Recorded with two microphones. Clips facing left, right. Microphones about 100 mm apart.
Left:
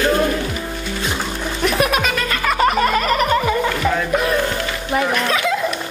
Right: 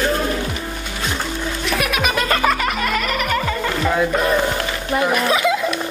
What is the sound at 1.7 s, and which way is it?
Music, 30° left (ahead or behind).